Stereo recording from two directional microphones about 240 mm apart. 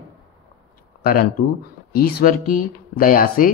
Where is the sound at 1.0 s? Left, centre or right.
Left.